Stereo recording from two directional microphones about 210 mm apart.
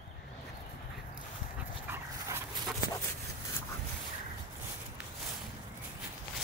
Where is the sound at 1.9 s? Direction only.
15° right (ahead or behind).